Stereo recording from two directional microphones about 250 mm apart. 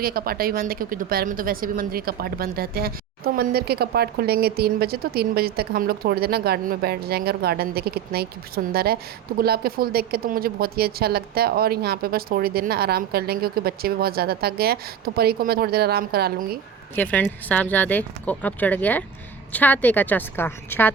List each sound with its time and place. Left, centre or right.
0.0 s speech: right
16.9 s speech: centre